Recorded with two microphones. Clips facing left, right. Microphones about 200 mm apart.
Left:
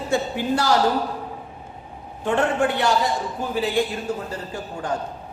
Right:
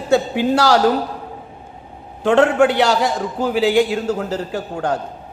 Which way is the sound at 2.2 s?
90° right.